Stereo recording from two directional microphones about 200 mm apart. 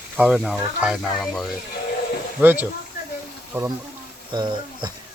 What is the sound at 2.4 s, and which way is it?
Speech, 10° right (ahead or behind).